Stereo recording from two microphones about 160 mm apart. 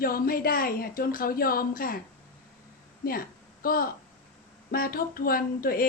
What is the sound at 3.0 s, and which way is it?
A woman's voice, 65° left (ahead or behind).